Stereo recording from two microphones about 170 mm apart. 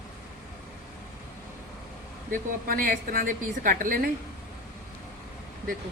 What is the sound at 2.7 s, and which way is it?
A woman's voice, 55° right (ahead or behind).